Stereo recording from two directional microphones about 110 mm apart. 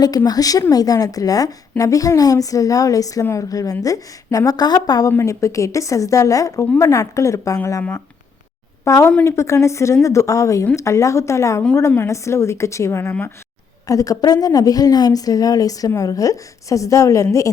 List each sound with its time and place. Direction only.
0.3 s a woman's voice: 35° left (ahead or behind)